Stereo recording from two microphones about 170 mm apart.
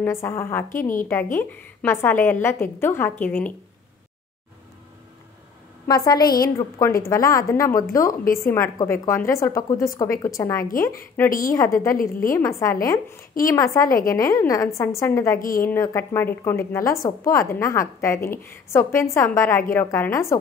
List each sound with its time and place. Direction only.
0.0 s a woman's voice: 15° left (ahead or behind)
5.9 s a woman's voice: 25° left (ahead or behind)
11.2 s a woman's voice: 55° left (ahead or behind)
11.5 s speech: 20° left (ahead or behind)
11.9 s a woman's voice: 55° left (ahead or behind)
12.4 s a woman's voice: 15° left (ahead or behind)